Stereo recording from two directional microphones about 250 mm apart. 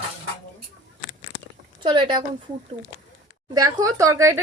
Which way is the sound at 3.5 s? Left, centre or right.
Centre.